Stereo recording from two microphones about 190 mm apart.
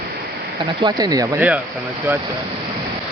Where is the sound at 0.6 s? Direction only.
20° right (ahead or behind).